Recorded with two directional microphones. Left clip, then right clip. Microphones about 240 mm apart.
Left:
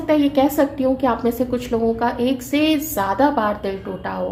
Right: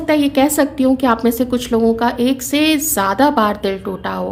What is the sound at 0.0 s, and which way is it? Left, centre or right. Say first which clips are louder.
A woman's voice: right 2 dB; right.